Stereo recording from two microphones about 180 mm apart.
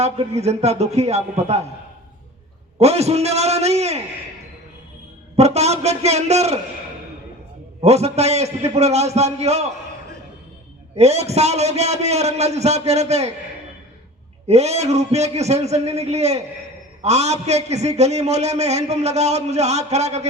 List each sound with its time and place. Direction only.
0.0 s a man's voice: 35° right (ahead or behind)
2.7 s a man's voice: 35° right (ahead or behind)
5.4 s a man's voice: 35° right (ahead or behind)
7.8 s a man's voice: 35° right (ahead or behind)
10.9 s a man's voice: 35° right (ahead or behind)
14.4 s a man's voice: 35° right (ahead or behind)